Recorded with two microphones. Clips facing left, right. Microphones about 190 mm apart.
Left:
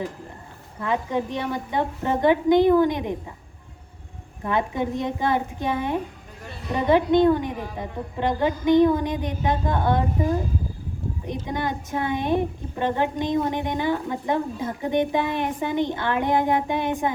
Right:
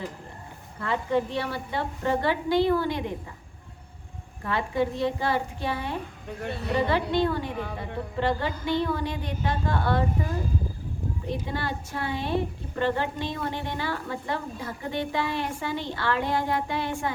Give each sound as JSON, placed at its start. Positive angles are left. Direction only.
{"t": 0.8, "sound": "a woman's voice", "side_deg": 15}
{"t": 4.4, "sound": "a woman's voice", "side_deg": 20}
{"t": 11.4, "sound": "a woman's voice", "side_deg": 15}